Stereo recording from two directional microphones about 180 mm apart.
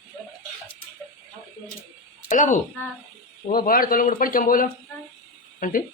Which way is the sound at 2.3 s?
45° left (ahead or behind).